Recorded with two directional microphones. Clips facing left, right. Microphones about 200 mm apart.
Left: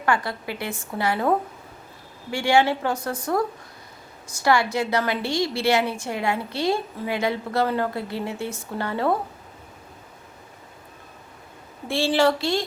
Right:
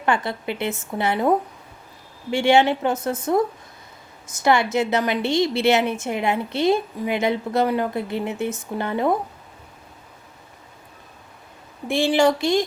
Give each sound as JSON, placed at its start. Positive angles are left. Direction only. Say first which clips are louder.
{"t": 0.0, "sound": "a woman's voice", "louder": "right 2 dB", "side_deg": -20}
{"t": 11.9, "sound": "speech", "louder": "right 2 dB", "side_deg": -15}